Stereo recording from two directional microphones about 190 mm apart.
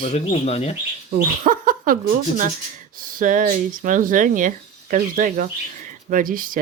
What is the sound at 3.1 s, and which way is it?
Speech, 45° right (ahead or behind).